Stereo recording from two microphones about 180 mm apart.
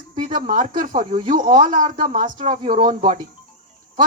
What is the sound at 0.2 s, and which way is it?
Speech, 45° right (ahead or behind).